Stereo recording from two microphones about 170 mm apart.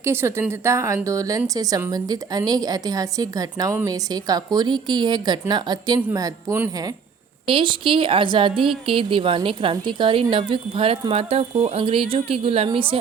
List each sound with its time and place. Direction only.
0.0 s a woman's voice: 15° right (ahead or behind)
7.4 s a woman's voice: 30° right (ahead or behind)